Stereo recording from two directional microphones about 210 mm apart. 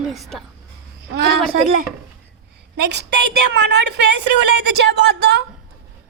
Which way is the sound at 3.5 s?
55° right (ahead or behind).